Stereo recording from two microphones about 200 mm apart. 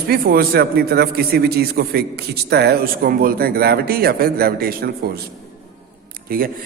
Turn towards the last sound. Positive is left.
turn(degrees=-45)  # may be behind; listen again after turning